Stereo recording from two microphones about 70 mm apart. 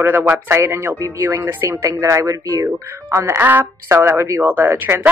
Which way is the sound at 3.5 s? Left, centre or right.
Right.